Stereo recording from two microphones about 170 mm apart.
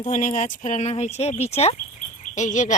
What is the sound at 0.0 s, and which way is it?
Speech, 50° left (ahead or behind).